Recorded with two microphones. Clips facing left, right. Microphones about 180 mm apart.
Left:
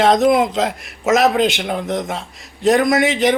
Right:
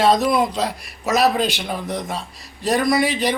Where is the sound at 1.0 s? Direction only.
80° left.